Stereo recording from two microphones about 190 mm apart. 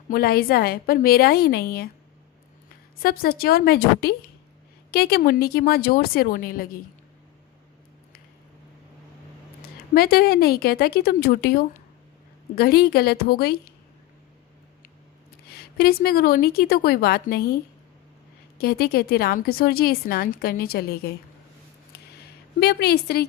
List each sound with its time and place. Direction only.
0.1 s a woman's voice: 50° left (ahead or behind)
3.0 s a woman's voice: 50° left (ahead or behind)
9.9 s a woman's voice: 55° left (ahead or behind)
15.5 s a woman's voice: 55° left (ahead or behind)
18.5 s a woman's voice: 55° left (ahead or behind)
21.9 s a sound: 60° left (ahead or behind)
22.6 s a woman's voice: 60° left (ahead or behind)